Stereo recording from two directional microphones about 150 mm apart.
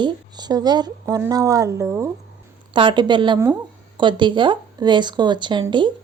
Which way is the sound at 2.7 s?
35° right (ahead or behind).